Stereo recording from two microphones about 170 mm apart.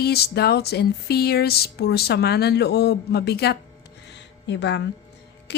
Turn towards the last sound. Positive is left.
turn(degrees=90)